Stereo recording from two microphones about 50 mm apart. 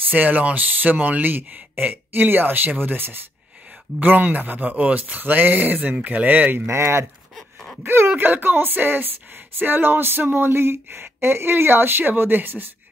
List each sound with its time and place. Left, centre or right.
0.1 s speech: right
6.6 s speech: right
7.3 s wail: centre
7.8 s speech: right